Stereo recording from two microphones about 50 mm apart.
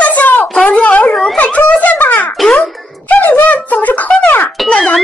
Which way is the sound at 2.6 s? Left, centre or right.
Left.